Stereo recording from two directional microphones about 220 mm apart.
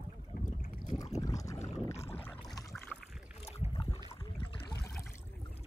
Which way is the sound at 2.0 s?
25° left (ahead or behind).